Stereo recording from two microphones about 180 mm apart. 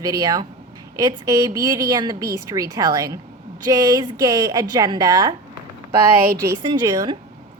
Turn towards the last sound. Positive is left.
turn(degrees=-25)  # may be behind; listen again after turning